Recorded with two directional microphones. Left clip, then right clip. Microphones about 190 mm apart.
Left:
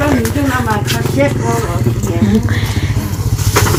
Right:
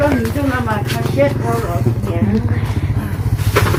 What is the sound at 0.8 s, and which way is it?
Speech, 35° left (ahead or behind).